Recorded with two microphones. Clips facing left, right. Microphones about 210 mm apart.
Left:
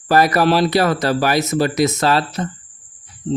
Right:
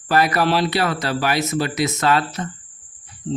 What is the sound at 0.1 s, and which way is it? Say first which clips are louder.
A man's voice: left 4 dB; 40° left (ahead or behind).